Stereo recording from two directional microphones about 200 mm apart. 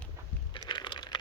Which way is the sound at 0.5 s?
25° left (ahead or behind).